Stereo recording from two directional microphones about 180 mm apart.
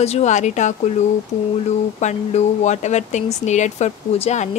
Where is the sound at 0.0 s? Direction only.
40° left (ahead or behind).